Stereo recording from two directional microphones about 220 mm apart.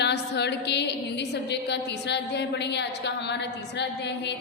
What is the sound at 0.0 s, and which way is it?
A woman's voice, 50° left (ahead or behind).